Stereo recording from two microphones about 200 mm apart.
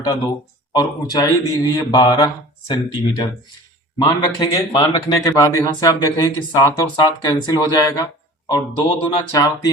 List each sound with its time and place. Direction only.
0.8 s speech: 15° left (ahead or behind)